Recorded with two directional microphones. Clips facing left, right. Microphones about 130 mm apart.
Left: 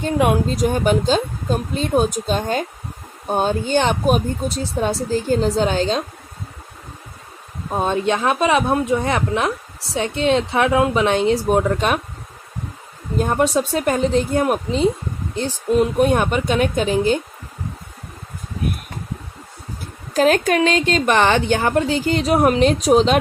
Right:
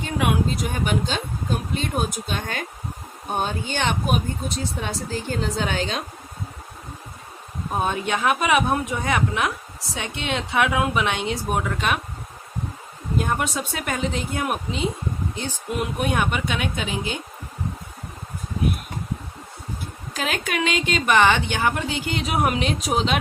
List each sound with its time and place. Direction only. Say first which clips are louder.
0.0 s a woman's voice: left 5 dB; 40° left (ahead or behind)
7.8 s a woman's voice: left 5 dB; 30° left (ahead or behind)
13.1 s a woman's voice: left 7 dB; 35° left (ahead or behind)
20.1 s a woman's voice: left 11 dB; 40° left (ahead or behind)